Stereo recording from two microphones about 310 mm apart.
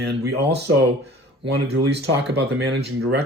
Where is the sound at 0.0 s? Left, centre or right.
Right.